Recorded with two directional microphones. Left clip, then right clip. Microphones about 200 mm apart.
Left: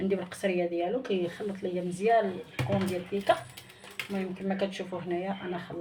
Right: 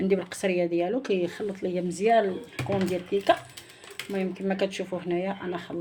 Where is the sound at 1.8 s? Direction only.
50° right (ahead or behind).